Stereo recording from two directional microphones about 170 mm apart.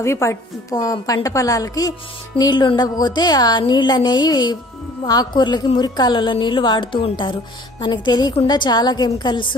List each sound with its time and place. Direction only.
0.0 s a woman's voice: 15° left (ahead or behind)